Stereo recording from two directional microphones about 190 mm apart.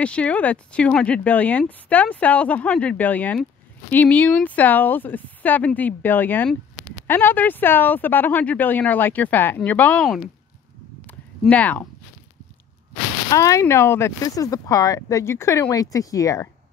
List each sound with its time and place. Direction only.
0.0 s speech: 5° left (ahead or behind)
11.1 s a sound: 5° left (ahead or behind)
13.3 s speech: 15° left (ahead or behind)